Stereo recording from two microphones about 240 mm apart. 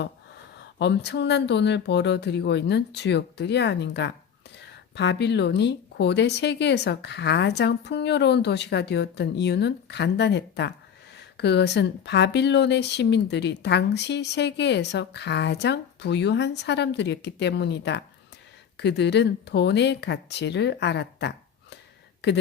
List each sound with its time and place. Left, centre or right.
0.8 s speech: left